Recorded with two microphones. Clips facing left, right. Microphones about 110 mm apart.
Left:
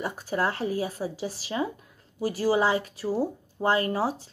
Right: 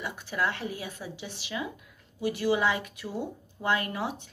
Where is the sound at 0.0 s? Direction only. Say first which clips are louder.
Left 4 dB; 40° left (ahead or behind).